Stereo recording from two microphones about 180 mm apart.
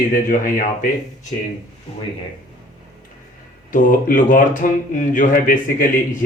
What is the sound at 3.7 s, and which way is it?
Speech, 50° left (ahead or behind).